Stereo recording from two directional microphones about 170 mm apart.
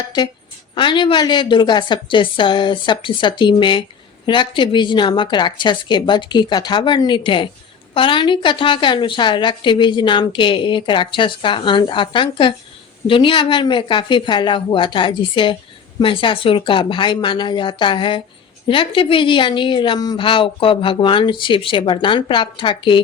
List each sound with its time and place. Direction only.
0.8 s a woman's voice: 30° left (ahead or behind)